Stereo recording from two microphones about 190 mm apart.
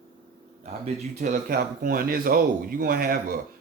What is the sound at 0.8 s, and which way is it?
Speech, 40° right (ahead or behind).